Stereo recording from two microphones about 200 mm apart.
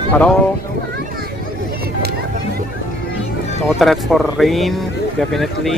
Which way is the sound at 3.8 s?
Centre (ahead or behind).